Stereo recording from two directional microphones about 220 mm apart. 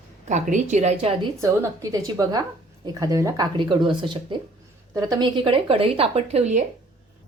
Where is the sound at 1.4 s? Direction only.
15° right (ahead or behind); by 6.6 s 30° right (ahead or behind).